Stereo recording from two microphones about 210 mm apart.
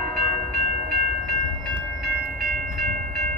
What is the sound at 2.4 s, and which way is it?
Train, 45° right (ahead or behind).